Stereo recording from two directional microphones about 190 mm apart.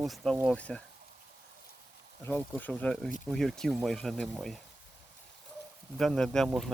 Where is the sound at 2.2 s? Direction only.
10° left (ahead or behind).